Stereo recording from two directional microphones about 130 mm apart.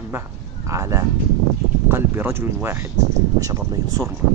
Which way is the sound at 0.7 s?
25° right (ahead or behind).